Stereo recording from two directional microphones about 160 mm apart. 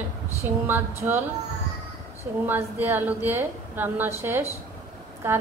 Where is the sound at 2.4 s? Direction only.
15° right (ahead or behind).